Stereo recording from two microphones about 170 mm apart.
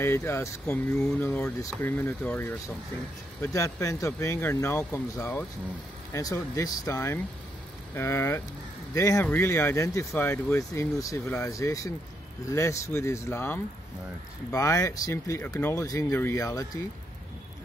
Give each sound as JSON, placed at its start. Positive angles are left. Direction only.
{"t": 0.0, "sound": "speech", "side_deg": 15}
{"t": 3.5, "sound": "speech", "side_deg": 15}